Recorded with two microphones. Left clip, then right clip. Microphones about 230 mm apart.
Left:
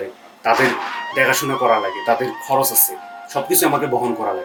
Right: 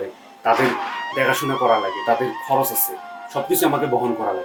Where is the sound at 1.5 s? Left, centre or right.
Right.